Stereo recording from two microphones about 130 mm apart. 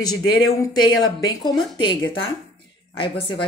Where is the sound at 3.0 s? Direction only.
45° left (ahead or behind).